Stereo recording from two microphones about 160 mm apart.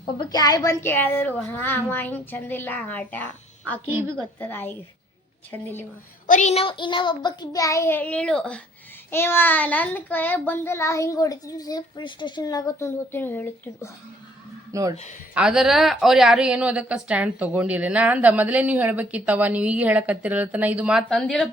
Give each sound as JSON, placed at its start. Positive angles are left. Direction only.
{"t": 0.3, "sound": "a child's voice", "side_deg": 25}
{"t": 6.2, "sound": "child singing", "side_deg": 50}
{"t": 9.1, "sound": "a child's voice", "side_deg": 15}
{"t": 14.7, "sound": "speech", "side_deg": -20}
{"t": 15.4, "sound": "a woman's voice", "side_deg": -5}